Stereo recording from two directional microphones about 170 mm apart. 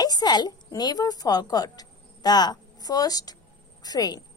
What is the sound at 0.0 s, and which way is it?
A woman's voice, 25° left (ahead or behind).